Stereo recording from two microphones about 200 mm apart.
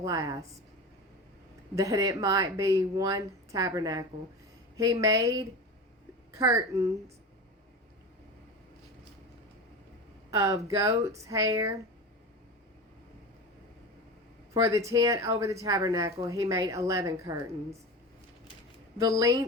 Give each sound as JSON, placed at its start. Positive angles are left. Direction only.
{"t": 0.0, "sound": "speech", "side_deg": -15}
{"t": 1.7, "sound": "speech", "side_deg": -15}
{"t": 10.3, "sound": "speech", "side_deg": -15}
{"t": 14.5, "sound": "speech", "side_deg": -15}
{"t": 18.9, "sound": "speech", "side_deg": -15}